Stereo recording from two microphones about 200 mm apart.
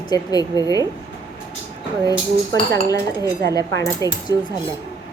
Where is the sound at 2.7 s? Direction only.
15° left (ahead or behind).